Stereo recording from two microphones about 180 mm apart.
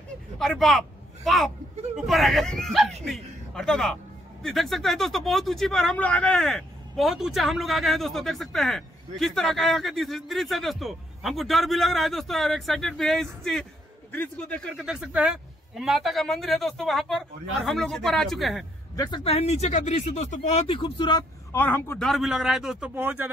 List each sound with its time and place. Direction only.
0.4 s a man's voice: centre (ahead or behind)
18.9 s speech: 25° left (ahead or behind)
21.5 s speech: 10° left (ahead or behind); by 23.3 s 10° right (ahead or behind)